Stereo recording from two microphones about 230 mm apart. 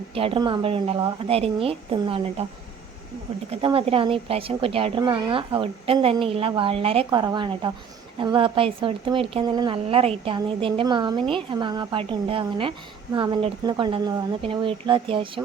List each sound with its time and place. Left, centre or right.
0.1 s a woman's voice: right
3.5 s a woman's voice: right